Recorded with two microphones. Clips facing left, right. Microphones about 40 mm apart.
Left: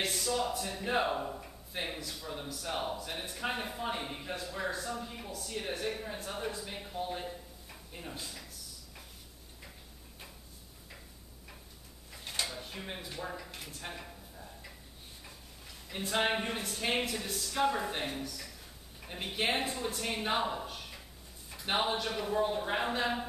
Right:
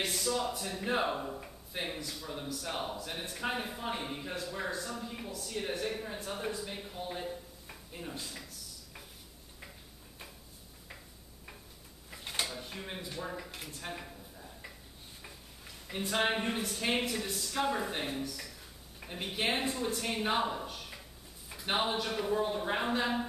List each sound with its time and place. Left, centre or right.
0.0 s speech: centre
12.1 s drawer open or close: centre
12.4 s a woman's voice: centre